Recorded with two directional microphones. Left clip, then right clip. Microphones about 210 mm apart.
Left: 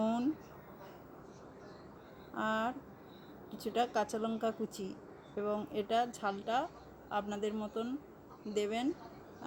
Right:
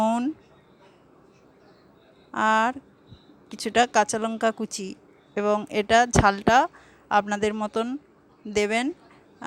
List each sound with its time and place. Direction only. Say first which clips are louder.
2.3 s speech: right 14 dB; 45° right (ahead or behind)